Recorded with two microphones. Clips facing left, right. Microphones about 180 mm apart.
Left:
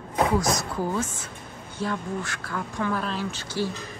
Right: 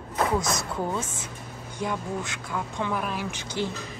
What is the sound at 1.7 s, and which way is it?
A woman's voice, 15° right (ahead or behind).